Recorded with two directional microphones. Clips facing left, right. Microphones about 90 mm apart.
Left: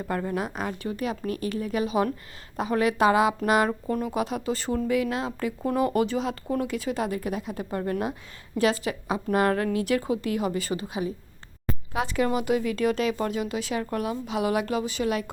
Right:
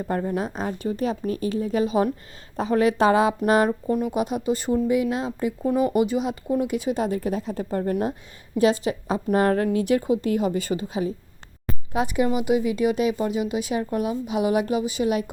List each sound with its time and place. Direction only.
0.1 s speech: 25° right (ahead or behind)
3.9 s speech: 15° right (ahead or behind)
5.6 s speech: 10° right (ahead or behind); by 7.6 s 30° right (ahead or behind)
8.5 s speech: 20° right (ahead or behind)
11.9 s speech: 20° right (ahead or behind)